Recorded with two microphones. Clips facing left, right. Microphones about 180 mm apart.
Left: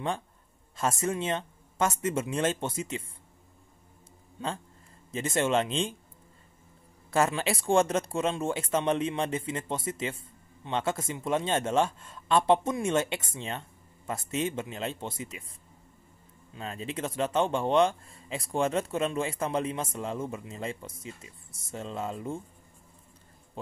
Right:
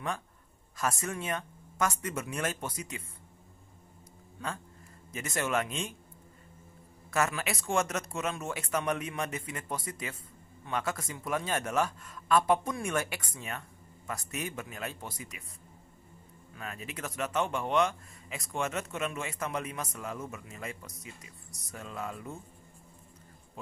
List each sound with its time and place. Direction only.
0.7 s speech: 25° left (ahead or behind)
4.4 s speech: 25° left (ahead or behind)
7.1 s speech: 30° left (ahead or behind)
16.5 s speech: 25° left (ahead or behind)